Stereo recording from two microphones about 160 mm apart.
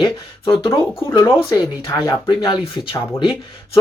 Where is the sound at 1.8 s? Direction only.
30° left (ahead or behind).